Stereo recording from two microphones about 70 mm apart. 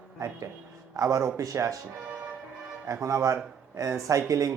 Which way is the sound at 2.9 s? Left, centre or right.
Right.